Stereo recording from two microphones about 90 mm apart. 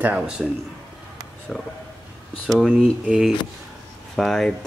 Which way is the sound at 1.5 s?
Centre (ahead or behind).